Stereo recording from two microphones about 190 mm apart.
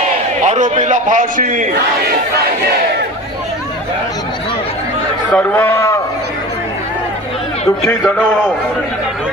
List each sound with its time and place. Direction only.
0.4 s a man's voice: 40° right (ahead or behind)
5.3 s a man's voice: 10° left (ahead or behind)
7.9 s a man's voice: 10° left (ahead or behind)